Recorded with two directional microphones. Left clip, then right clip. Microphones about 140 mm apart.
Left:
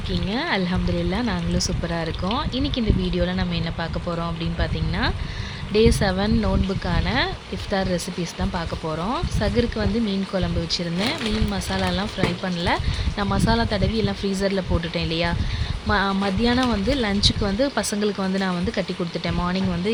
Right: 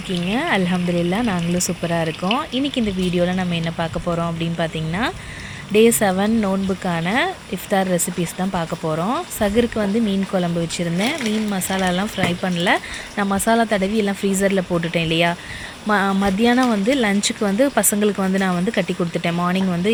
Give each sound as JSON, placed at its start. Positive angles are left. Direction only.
{"t": 0.3, "sound": "speech", "side_deg": -15}